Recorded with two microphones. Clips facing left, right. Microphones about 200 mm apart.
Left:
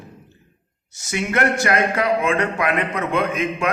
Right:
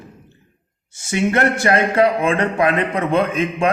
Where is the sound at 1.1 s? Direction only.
30° right (ahead or behind).